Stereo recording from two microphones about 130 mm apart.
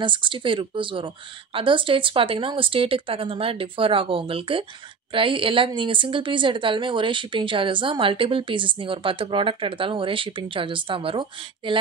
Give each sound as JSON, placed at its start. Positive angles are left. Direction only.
{"t": 0.0, "sound": "a woman's voice", "side_deg": -40}